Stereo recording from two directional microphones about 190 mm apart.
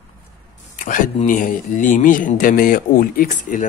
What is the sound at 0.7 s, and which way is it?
Speech, 45° left (ahead or behind).